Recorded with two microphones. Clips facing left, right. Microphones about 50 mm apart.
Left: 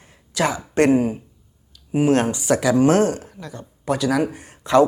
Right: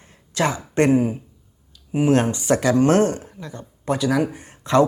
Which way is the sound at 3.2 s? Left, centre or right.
Centre.